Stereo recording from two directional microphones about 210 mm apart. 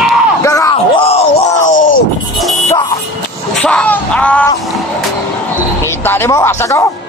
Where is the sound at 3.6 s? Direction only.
5° left (ahead or behind).